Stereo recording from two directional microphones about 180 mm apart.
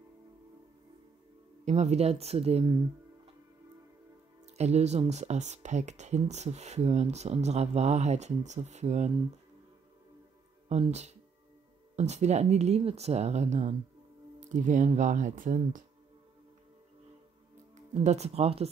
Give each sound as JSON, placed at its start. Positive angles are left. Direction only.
{"t": 1.6, "sound": "speech", "side_deg": -40}
{"t": 4.6, "sound": "speech", "side_deg": -35}
{"t": 10.7, "sound": "speech", "side_deg": -40}
{"t": 17.7, "sound": "speech", "side_deg": -40}